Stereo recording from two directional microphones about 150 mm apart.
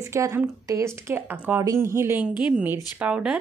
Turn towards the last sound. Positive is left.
turn(degrees=-10)  # may be behind; listen again after turning